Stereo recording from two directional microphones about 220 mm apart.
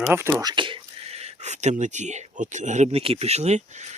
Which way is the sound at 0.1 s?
10° right (ahead or behind).